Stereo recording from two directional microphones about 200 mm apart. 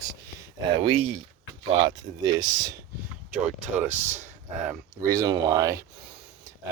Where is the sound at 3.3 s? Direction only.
5° right (ahead or behind).